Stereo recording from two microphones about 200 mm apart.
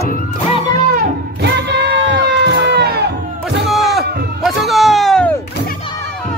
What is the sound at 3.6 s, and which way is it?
Music, centre (ahead or behind).